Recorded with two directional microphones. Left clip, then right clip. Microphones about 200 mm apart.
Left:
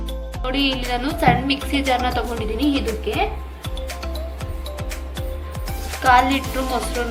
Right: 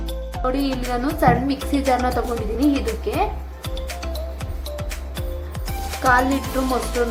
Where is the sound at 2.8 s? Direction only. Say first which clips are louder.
Left 1 dB; centre (ahead or behind).